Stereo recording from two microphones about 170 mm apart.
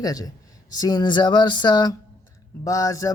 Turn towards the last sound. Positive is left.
turn(degrees=20)  # may be behind; listen again after turning